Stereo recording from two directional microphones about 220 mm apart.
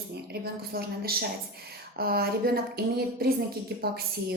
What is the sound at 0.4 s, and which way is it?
Speech, 45° right (ahead or behind).